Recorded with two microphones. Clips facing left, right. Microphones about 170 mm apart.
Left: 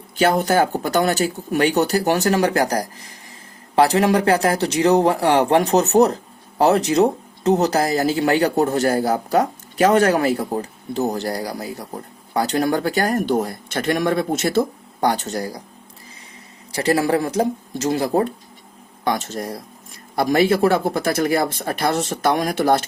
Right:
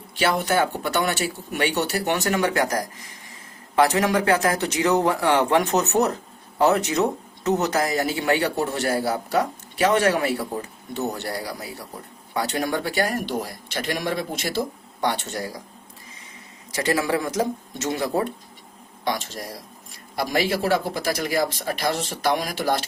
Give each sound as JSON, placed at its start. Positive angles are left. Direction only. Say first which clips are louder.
{"t": 0.2, "sound": "speech", "louder": "left 5 dB", "side_deg": 40}
{"t": 15.0, "sound": "speech", "louder": "left 5 dB", "side_deg": 40}
{"t": 16.7, "sound": "speech", "louder": "left 5 dB", "side_deg": 35}
{"t": 19.0, "sound": "speech", "louder": "left 5 dB", "side_deg": 50}